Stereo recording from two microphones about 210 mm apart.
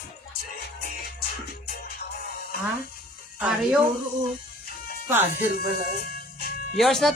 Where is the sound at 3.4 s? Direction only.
5° right (ahead or behind).